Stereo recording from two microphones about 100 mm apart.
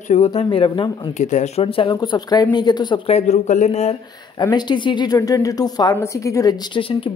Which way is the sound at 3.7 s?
90° left.